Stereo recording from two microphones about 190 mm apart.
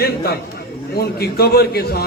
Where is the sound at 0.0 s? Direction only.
55° left (ahead or behind).